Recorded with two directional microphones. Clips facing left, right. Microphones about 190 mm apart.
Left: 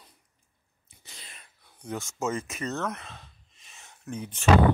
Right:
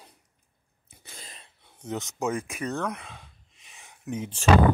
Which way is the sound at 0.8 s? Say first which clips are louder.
Right 4 dB; 50° right (ahead or behind).